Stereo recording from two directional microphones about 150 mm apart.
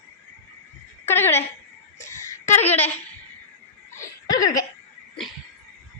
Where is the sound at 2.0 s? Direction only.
55° left (ahead or behind).